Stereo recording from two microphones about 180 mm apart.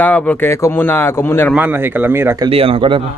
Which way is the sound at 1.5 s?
10° right (ahead or behind).